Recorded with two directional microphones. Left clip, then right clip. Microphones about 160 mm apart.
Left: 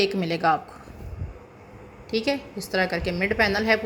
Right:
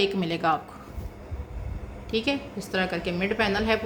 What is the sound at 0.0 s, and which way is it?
Speech, 25° left (ahead or behind).